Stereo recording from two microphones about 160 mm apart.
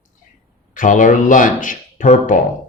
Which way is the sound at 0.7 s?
55° left (ahead or behind).